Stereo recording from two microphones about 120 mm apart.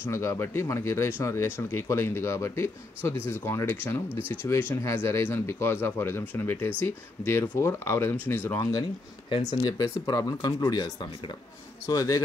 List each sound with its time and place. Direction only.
0.0 s speech: 25° left (ahead or behind)
9.4 s speech: 30° left (ahead or behind)
11.9 s speech: 35° left (ahead or behind)